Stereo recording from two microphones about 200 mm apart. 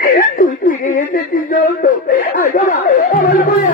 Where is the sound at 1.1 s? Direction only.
45° left (ahead or behind).